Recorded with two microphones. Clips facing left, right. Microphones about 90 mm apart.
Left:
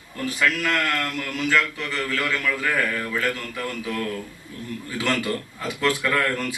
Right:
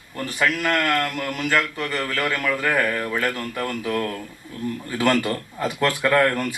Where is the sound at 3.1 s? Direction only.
50° right (ahead or behind).